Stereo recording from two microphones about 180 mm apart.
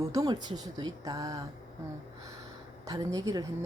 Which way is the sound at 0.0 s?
20° right (ahead or behind).